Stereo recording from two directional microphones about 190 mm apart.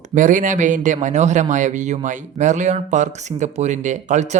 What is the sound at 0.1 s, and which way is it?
Speech, 40° right (ahead or behind).